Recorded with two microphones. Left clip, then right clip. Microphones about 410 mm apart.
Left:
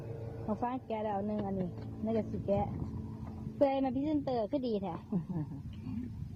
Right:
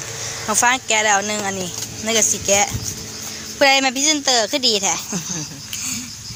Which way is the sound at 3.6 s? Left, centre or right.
Left.